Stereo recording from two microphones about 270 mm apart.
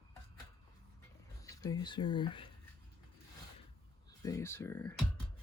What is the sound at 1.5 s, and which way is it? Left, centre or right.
Speech, centre.